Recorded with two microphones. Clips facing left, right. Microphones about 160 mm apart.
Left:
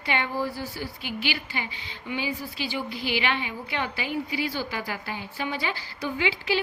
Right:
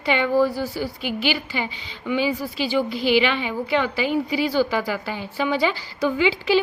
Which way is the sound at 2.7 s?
90° right.